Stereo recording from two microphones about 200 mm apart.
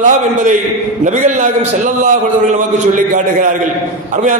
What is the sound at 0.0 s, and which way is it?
A man's voice, 40° right (ahead or behind).